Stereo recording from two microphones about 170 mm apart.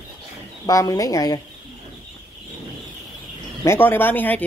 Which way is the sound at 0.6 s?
20° left (ahead or behind).